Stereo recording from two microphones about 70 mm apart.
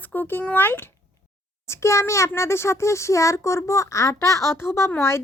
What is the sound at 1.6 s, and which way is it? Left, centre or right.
A child's voice, left.